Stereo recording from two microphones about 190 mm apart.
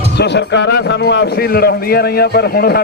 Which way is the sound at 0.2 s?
65° left (ahead or behind).